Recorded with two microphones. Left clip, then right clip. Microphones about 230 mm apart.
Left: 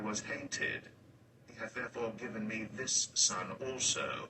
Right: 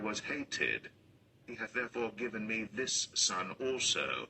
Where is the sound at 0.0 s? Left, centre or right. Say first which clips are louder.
Right 2 dB; right.